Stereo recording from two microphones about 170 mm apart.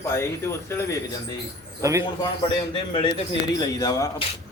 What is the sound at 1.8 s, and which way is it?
Speech, 20° right (ahead or behind).